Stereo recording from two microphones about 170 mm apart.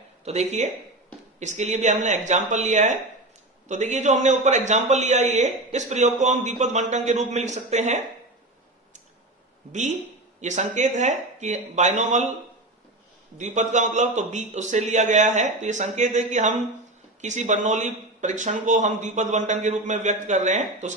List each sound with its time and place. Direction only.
0.3 s speech: 40° right (ahead or behind)
10.4 s speech: 45° right (ahead or behind)
13.4 s speech: 45° right (ahead or behind)